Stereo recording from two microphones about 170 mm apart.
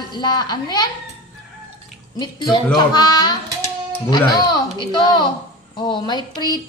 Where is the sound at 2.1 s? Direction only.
25° left (ahead or behind).